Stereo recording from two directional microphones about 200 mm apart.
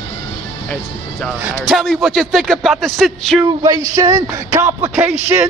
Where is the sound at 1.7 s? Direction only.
Centre (ahead or behind).